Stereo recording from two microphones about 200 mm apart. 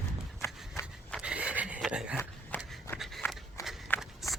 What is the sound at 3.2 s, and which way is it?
Walk, 10° left (ahead or behind).